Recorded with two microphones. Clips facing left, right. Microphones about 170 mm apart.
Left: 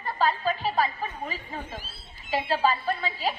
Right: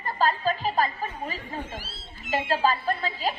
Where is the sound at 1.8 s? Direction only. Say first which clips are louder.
Right 5 dB; 90° right.